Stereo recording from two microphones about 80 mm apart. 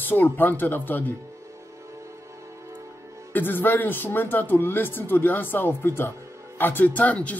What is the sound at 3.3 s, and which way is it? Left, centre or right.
Speech, left.